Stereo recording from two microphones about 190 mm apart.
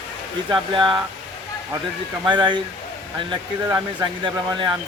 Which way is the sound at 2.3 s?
25° right (ahead or behind).